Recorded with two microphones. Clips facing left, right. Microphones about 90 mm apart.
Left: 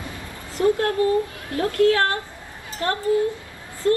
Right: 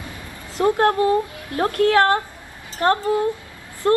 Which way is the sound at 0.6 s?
30° right (ahead or behind).